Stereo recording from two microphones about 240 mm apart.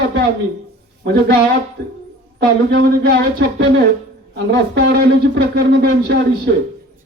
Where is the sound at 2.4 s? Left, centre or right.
Right.